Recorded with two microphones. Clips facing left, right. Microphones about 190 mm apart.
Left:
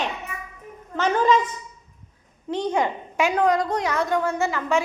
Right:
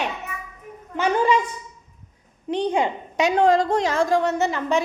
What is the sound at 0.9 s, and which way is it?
A woman's voice, 10° right (ahead or behind).